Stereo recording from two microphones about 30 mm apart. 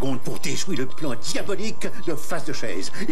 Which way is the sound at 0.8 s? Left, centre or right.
Right.